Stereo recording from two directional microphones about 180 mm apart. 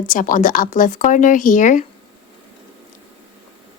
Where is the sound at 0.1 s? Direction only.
45° left (ahead or behind).